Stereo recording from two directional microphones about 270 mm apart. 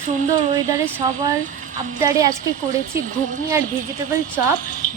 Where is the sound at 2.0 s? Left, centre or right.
Centre.